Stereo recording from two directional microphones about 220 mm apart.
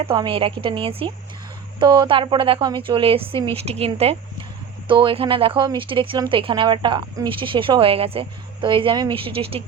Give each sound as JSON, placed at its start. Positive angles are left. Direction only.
{"t": 0.0, "sound": "speech", "side_deg": -25}